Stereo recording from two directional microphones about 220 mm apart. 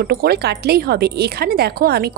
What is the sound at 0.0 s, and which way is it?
A woman's voice, 45° right (ahead or behind).